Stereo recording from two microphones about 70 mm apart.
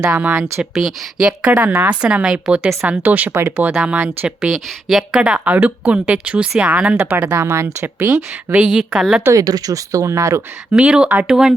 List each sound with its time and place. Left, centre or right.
0.0 s a woman's voice: centre
0.3 s speech: right
0.6 s speech: centre
1.5 s speech: right
3.9 s speech: right
4.4 s a woman's voice: centre; by 7.3 s right
7.3 s speech: right
8.5 s a woman's voice: centre
9.3 s speech: right
10.7 s a woman's voice: centre